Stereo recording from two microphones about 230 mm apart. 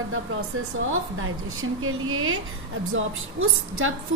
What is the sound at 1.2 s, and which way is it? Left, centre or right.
A woman's voice, right.